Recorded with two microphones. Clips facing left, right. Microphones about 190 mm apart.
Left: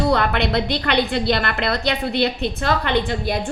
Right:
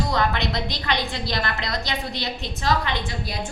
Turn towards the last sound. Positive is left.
turn(degrees=60)  # may be behind; listen again after turning